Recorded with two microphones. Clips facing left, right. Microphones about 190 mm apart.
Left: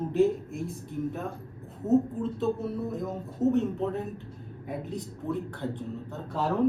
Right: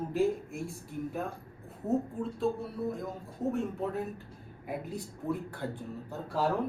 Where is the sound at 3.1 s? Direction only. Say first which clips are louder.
Left 7 dB; 20° left (ahead or behind).